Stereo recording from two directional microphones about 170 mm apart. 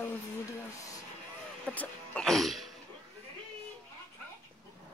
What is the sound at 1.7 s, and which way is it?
Speech, 10° left (ahead or behind).